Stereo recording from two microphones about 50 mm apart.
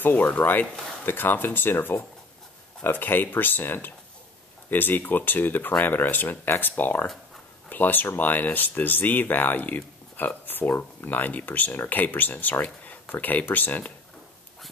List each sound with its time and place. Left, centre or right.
0.0 s speech: left